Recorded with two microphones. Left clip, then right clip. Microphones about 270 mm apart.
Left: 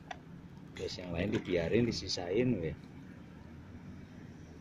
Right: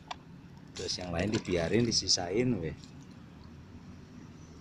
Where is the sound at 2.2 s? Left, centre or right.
Centre.